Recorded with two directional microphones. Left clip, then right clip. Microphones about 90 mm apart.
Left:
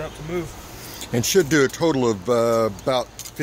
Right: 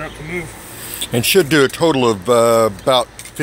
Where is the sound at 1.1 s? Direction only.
15° left (ahead or behind).